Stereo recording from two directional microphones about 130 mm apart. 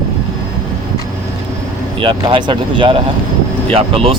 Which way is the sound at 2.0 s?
40° right (ahead or behind).